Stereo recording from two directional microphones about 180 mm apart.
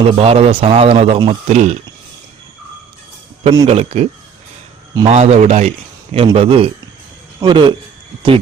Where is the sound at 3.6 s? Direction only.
35° right (ahead or behind).